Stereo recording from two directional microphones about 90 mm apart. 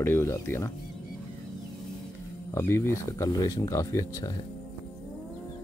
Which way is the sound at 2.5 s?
30° left (ahead or behind).